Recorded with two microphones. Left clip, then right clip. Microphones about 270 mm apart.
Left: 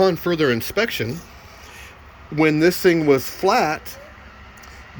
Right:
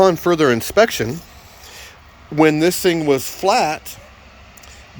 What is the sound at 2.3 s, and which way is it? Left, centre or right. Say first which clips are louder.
Speech: right 3 dB; centre.